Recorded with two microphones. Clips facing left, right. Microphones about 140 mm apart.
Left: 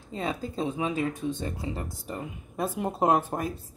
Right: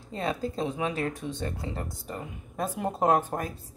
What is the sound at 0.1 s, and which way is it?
Speech, 5° left (ahead or behind).